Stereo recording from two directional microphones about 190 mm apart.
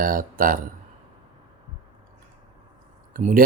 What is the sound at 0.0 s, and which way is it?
Speech, 45° right (ahead or behind).